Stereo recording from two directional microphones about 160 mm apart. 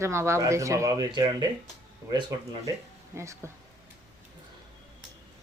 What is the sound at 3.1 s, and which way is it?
Speech, 20° right (ahead or behind).